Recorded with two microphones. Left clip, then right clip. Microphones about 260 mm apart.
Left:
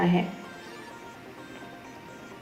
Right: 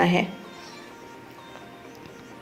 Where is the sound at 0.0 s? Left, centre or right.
Right.